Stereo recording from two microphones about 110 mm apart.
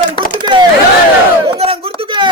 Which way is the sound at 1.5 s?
60° right (ahead or behind).